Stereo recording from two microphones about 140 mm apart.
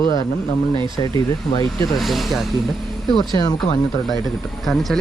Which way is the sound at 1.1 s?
25° left (ahead or behind).